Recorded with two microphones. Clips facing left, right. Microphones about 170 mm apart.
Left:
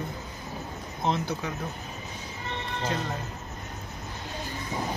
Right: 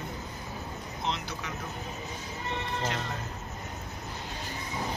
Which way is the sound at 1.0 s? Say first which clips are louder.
Left 7 dB; 50° left (ahead or behind).